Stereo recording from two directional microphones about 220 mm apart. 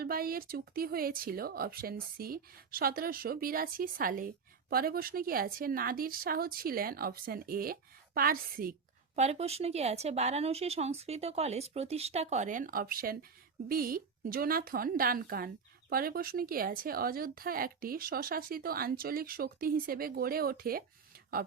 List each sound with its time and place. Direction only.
0.0 s speech: 40° right (ahead or behind)
9.1 s a woman's voice: 30° right (ahead or behind)